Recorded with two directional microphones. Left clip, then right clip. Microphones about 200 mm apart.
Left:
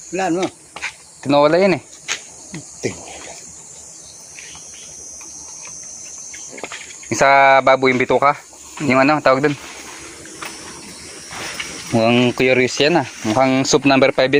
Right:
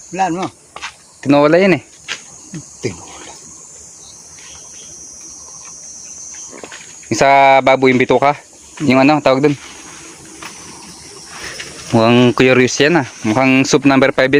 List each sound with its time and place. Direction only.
0.1 s speech: 40° right (ahead or behind)
7.1 s speech: 40° right (ahead or behind)
11.9 s speech: 40° right (ahead or behind)